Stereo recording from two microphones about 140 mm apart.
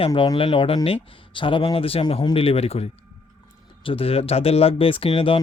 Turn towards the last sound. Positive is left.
turn(degrees=40)  # may be behind; listen again after turning